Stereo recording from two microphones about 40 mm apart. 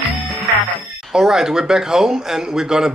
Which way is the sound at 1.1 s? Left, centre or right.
Centre.